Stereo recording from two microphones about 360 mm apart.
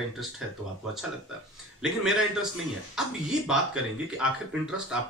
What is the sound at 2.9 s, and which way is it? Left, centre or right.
Speech, centre.